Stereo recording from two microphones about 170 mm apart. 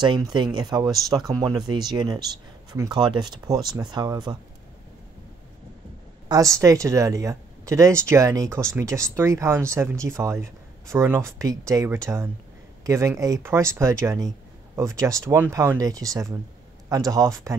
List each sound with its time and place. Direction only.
0.0 s speech: 25° right (ahead or behind)
6.2 s speech: 20° right (ahead or behind)